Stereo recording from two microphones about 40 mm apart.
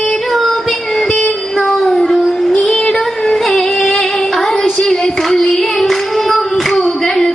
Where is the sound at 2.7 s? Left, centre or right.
Left.